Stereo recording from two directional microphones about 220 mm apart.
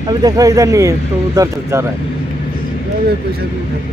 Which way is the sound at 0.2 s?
15° right (ahead or behind).